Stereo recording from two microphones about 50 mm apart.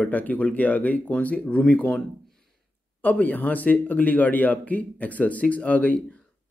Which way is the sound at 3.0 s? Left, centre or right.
Left.